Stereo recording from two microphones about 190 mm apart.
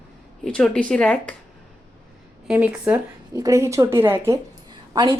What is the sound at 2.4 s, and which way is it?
A woman's voice, 10° right (ahead or behind).